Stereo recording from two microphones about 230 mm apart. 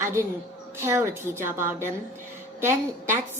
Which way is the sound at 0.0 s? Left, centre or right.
Centre.